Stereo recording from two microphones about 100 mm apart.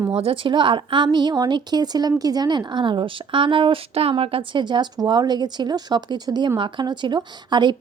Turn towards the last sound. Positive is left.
turn(degrees=-50)  # may be behind; listen again after turning